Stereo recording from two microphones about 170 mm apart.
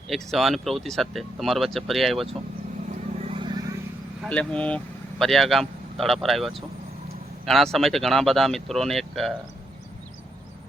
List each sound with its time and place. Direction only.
0.1 s speech: centre (ahead or behind)
3.2 s a sound: 35° right (ahead or behind)
4.2 s speech: 5° left (ahead or behind)